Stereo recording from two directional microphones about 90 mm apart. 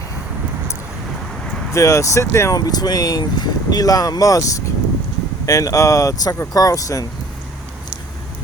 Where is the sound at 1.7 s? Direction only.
35° left (ahead or behind).